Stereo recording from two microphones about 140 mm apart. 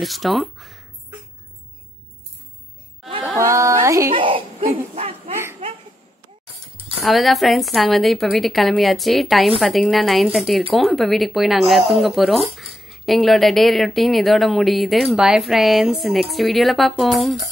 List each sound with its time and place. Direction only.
0.0 s speech: centre (ahead or behind)
3.3 s speech: 20° right (ahead or behind)
4.1 s speech: 40° right (ahead or behind)
7.1 s speech: centre (ahead or behind)